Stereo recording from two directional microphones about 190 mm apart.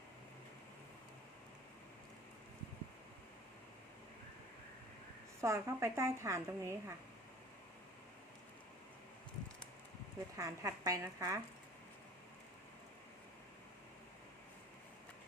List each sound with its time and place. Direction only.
5.4 s a woman's voice: 15° right (ahead or behind)
10.3 s a woman's voice: 15° right (ahead or behind)